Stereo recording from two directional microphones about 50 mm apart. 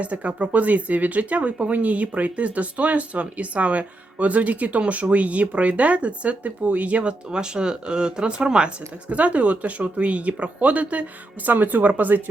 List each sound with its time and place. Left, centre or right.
0.0 s speech: right